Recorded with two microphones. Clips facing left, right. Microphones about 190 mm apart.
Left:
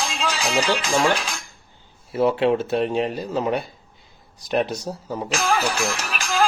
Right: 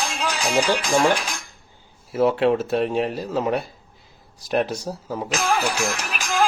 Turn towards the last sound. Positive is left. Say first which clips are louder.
# even
turn(degrees=0)  # may be behind; listen again after turning